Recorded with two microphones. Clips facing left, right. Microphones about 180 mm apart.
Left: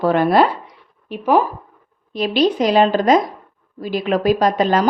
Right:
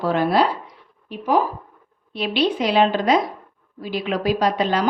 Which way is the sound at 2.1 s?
40° left (ahead or behind).